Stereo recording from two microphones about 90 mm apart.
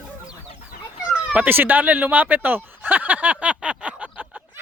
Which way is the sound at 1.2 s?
20° right (ahead or behind).